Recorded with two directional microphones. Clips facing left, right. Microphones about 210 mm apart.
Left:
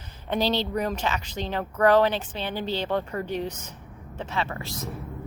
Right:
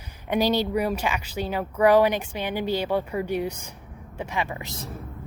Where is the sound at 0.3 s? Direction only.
10° right (ahead or behind).